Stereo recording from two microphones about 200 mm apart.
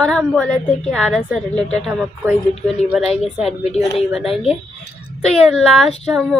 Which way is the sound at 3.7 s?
30° left (ahead or behind).